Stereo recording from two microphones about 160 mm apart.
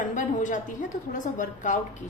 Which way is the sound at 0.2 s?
50° left (ahead or behind).